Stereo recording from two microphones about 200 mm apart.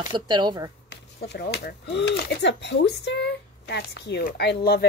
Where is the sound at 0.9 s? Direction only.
55° left (ahead or behind).